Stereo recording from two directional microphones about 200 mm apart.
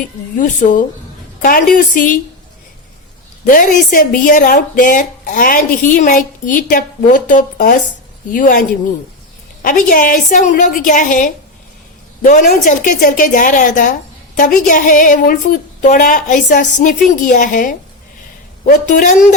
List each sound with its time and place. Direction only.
0.3 s a woman's voice: 40° left (ahead or behind)
3.4 s a woman's voice: 40° left (ahead or behind)